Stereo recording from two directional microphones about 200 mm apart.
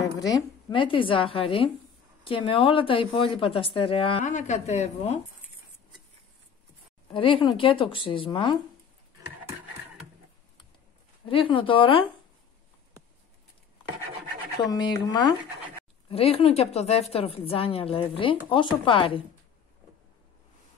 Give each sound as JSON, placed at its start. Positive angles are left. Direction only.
{"t": 0.2, "sound": "a woman's voice", "side_deg": 20}
{"t": 4.3, "sound": "a woman's voice", "side_deg": 35}
{"t": 7.1, "sound": "a woman's voice", "side_deg": 25}
{"t": 11.2, "sound": "a woman's voice", "side_deg": 25}
{"t": 14.6, "sound": "a woman's voice", "side_deg": 20}